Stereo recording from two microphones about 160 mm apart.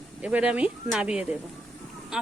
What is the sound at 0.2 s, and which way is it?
Speech, 5° right (ahead or behind).